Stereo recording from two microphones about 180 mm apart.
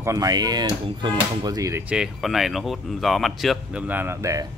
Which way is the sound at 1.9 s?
5° right (ahead or behind).